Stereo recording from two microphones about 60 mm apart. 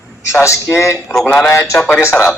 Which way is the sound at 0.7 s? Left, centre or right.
Left.